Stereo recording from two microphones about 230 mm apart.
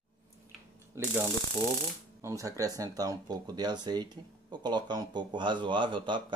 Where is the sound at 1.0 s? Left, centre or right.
Centre.